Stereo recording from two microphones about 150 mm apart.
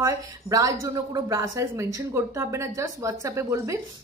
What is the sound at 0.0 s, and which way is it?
A woman's voice, 25° right (ahead or behind).